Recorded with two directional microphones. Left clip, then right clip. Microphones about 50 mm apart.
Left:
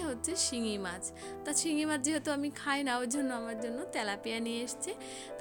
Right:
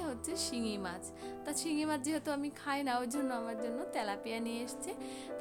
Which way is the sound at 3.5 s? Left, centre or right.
Left.